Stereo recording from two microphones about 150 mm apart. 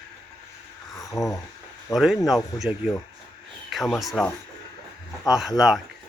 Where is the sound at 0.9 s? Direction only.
20° left (ahead or behind).